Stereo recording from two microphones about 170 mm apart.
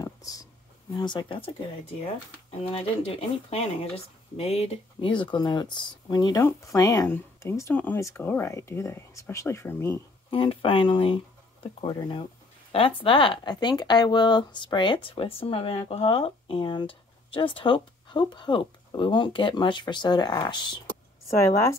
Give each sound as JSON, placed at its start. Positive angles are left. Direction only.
{"t": 0.0, "sound": "a sound", "side_deg": 20}
{"t": 0.9, "sound": "speech", "side_deg": 25}
{"t": 2.6, "sound": "speech", "side_deg": 35}
{"t": 10.3, "sound": "speech", "side_deg": 30}